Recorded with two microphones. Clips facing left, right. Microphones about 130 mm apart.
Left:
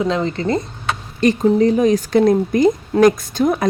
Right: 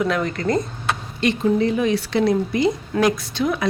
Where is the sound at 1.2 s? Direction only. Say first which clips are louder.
Left 5 dB; 40° left (ahead or behind).